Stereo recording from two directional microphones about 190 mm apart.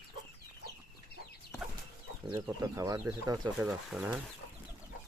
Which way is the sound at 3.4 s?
5° right (ahead or behind).